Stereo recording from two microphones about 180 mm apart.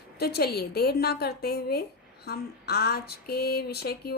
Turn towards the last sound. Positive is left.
turn(degrees=60)  # may be behind; listen again after turning